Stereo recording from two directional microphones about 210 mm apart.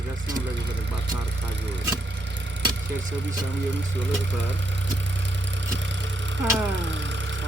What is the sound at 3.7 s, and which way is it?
Vehicle, 60° right (ahead or behind).